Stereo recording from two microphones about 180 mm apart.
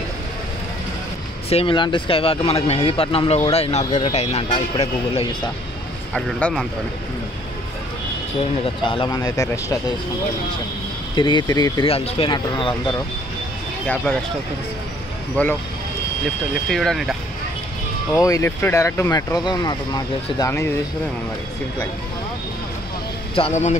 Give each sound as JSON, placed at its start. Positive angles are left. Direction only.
{"t": 1.5, "sound": "speech", "side_deg": 30}
{"t": 6.1, "sound": "speech", "side_deg": 5}
{"t": 8.6, "sound": "speech", "side_deg": 30}
{"t": 11.1, "sound": "speech", "side_deg": 25}
{"t": 15.4, "sound": "speech", "side_deg": 10}
{"t": 16.6, "sound": "speech", "side_deg": 0}
{"t": 18.2, "sound": "speech", "side_deg": 15}
{"t": 23.3, "sound": "speech", "side_deg": 35}